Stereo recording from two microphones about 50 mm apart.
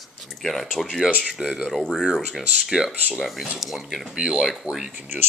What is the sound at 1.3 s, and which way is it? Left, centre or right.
Speech, centre.